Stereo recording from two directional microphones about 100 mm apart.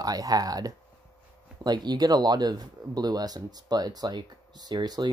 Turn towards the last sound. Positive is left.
turn(degrees=-45)  # may be behind; listen again after turning